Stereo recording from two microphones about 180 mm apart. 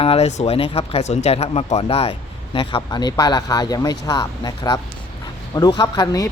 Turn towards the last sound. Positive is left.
turn(degrees=20)  # may be behind; listen again after turning